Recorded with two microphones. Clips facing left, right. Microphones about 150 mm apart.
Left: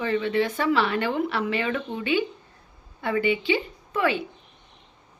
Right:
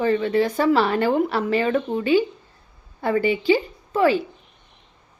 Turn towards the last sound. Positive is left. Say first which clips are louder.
# right 6 dB
turn(degrees=-35)  # may be behind; listen again after turning